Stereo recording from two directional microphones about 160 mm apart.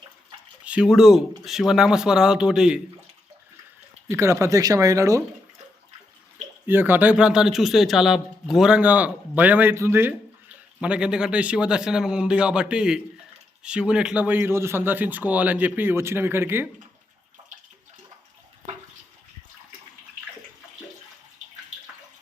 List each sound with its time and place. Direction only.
0.6 s a man's voice: 5° right (ahead or behind)
4.1 s speech: 15° right (ahead or behind)
6.7 s a man's voice: 15° right (ahead or behind)